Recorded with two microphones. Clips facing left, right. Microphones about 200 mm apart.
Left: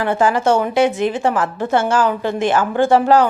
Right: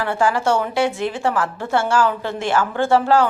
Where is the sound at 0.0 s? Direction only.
20° left (ahead or behind).